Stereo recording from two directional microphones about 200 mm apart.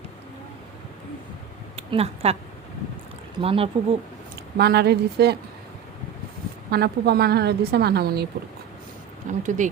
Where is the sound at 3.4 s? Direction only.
30° right (ahead or behind).